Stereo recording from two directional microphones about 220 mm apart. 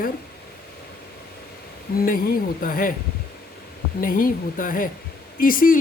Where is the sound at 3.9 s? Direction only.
40° left (ahead or behind).